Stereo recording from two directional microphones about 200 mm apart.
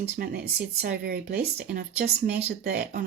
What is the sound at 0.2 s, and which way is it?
Speech, 50° right (ahead or behind).